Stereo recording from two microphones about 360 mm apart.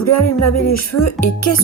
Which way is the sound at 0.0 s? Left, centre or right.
Left.